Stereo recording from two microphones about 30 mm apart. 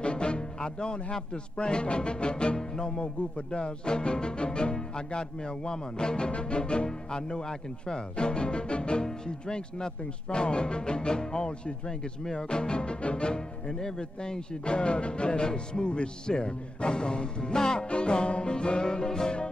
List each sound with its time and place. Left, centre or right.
0.0 s music: left
1.1 s speech: left
9.0 s speech: left